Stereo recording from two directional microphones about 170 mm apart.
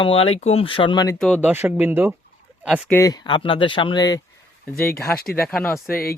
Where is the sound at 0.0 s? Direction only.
30° left (ahead or behind).